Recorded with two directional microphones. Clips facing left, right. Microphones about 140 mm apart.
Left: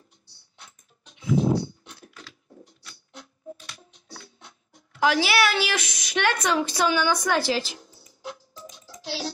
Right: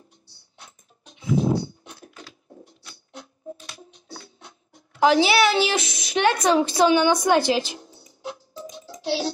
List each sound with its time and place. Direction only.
0.6 s a sound: 30° right (ahead or behind)
1.9 s computer keyboard: 40° right (ahead or behind)
2.8 s music: 25° right (ahead or behind)
4.9 s a woman's voice: 30° right (ahead or behind)